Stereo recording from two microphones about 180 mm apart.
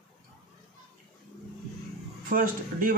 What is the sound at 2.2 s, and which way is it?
Speech, 50° right (ahead or behind).